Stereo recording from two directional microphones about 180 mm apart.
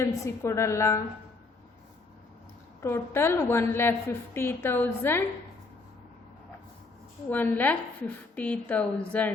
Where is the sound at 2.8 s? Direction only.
15° left (ahead or behind).